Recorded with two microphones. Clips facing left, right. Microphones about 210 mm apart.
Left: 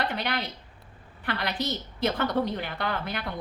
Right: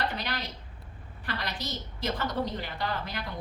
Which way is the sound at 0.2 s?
60° left (ahead or behind).